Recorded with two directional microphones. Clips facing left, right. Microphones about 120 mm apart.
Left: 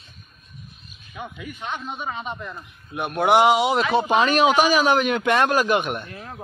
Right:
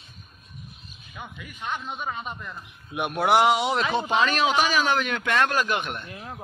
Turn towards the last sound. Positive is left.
turn(degrees=-20)  # may be behind; listen again after turning